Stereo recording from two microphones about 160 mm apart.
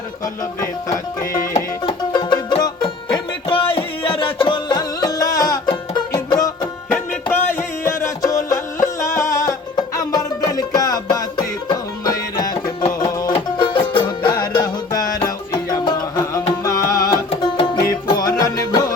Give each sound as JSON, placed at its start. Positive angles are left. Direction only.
{"t": 1.4, "sound": "music", "side_deg": 45}
{"t": 2.1, "sound": "music", "side_deg": 25}
{"t": 6.9, "sound": "music", "side_deg": 10}